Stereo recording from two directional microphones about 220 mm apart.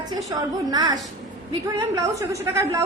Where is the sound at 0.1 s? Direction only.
20° right (ahead or behind).